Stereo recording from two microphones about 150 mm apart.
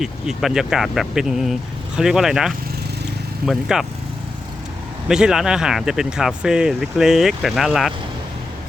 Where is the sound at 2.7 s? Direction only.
90° right.